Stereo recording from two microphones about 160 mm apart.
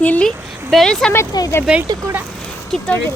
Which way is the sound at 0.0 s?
10° left (ahead or behind).